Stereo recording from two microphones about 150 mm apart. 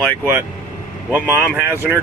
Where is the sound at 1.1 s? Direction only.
10° right (ahead or behind).